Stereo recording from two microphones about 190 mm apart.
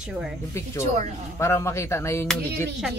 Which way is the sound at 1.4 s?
15° left (ahead or behind).